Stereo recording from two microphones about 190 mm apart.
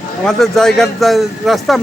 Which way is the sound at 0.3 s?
Centre (ahead or behind).